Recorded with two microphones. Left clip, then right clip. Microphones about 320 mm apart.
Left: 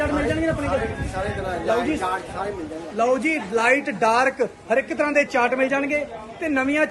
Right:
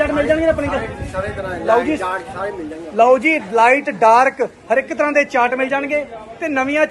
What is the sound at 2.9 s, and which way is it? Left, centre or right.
A man's voice, centre.